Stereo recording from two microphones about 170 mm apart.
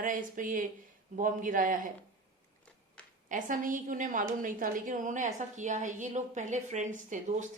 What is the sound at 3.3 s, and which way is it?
A woman's voice, 50° right (ahead or behind).